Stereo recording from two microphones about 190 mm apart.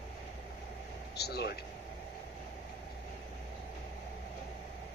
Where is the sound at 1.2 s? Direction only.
60° left (ahead or behind).